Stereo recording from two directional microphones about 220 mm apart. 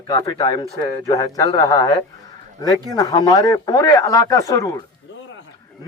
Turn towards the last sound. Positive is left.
turn(degrees=15)  # may be behind; listen again after turning